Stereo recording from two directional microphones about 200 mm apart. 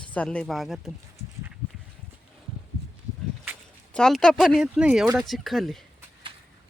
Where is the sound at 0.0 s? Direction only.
5° left (ahead or behind).